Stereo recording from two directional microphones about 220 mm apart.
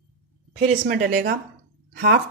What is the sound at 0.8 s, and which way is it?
Speech, 45° right (ahead or behind).